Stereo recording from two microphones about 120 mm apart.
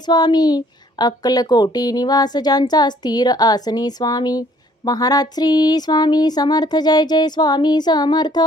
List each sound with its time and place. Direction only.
0.1 s speech: 35° left (ahead or behind)